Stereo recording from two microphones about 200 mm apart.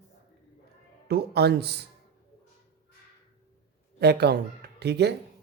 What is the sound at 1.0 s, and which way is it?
Speech, 55° right (ahead or behind).